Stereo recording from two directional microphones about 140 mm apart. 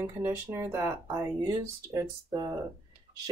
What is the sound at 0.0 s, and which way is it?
Speech, 20° right (ahead or behind).